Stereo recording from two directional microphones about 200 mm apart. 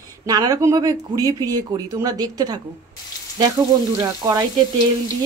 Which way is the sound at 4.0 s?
20° right (ahead or behind).